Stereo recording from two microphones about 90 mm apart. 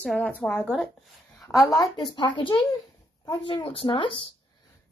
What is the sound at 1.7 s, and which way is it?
Speech, 60° left (ahead or behind).